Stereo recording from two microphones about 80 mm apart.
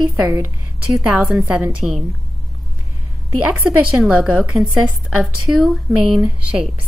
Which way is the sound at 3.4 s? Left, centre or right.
Centre.